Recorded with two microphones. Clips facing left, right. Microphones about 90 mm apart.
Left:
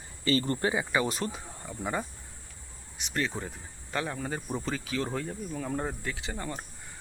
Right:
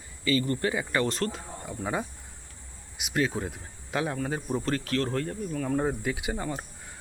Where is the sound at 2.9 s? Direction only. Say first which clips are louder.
Right 4 dB; 5° right (ahead or behind).